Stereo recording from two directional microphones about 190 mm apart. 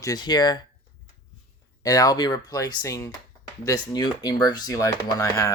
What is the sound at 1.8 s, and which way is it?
Speech, 20° left (ahead or behind).